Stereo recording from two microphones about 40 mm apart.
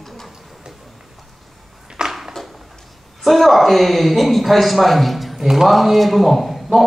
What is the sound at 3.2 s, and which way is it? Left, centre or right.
A man's voice, centre.